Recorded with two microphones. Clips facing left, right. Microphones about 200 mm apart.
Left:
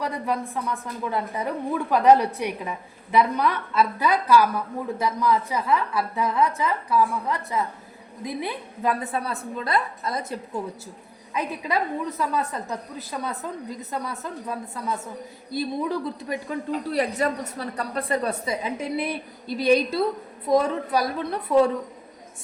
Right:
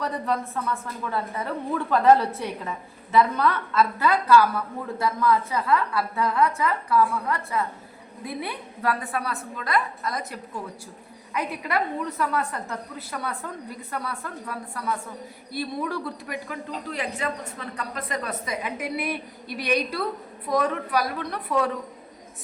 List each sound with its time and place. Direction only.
0.0 s a woman's voice: 10° left (ahead or behind)
11.3 s a woman's voice: 20° left (ahead or behind)